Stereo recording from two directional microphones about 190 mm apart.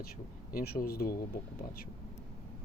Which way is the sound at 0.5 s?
50° left (ahead or behind).